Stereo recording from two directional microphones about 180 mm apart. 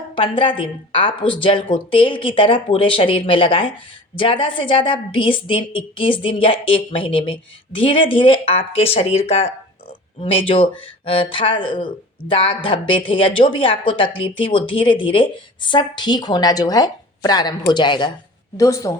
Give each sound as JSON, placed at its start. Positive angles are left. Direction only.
{"t": 0.2, "sound": "a woman's voice", "side_deg": 30}